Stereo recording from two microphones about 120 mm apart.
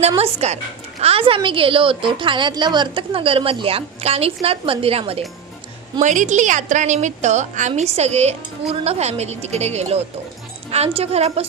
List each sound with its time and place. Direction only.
0.2 s a woman's voice: 65° right (ahead or behind)
6.0 s a woman's voice: 85° right
7.8 s speech: 65° right (ahead or behind)